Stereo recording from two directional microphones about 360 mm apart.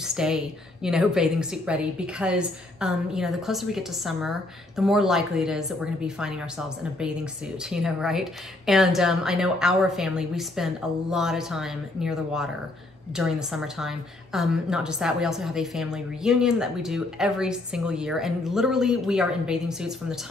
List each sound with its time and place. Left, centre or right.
0.0 s a sound: centre
0.8 s a woman's voice: centre
7.7 s a woman's voice: centre